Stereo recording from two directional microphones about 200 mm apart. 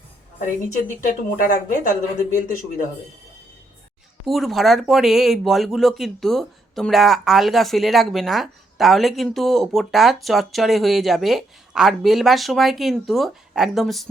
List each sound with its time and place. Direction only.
0.3 s a woman's voice: 40° left (ahead or behind)
4.3 s speech: centre (ahead or behind)